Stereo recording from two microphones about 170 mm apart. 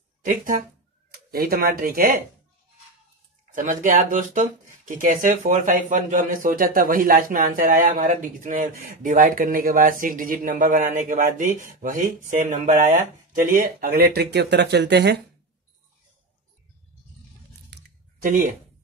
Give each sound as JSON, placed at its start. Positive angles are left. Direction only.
{"t": 0.2, "sound": "speech", "side_deg": -50}
{"t": 3.5, "sound": "speech", "side_deg": -50}
{"t": 17.7, "sound": "a sound", "side_deg": -90}
{"t": 18.2, "sound": "speech", "side_deg": -50}